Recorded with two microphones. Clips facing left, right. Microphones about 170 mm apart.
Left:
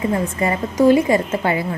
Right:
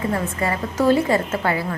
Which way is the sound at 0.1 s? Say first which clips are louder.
Left 3 dB; 20° left (ahead or behind).